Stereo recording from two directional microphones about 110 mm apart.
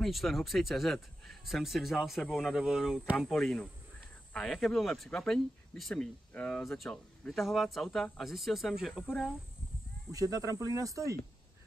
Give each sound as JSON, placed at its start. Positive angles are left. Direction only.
{"t": 0.0, "sound": "speech", "side_deg": 0}
{"t": 10.1, "sound": "speech", "side_deg": -30}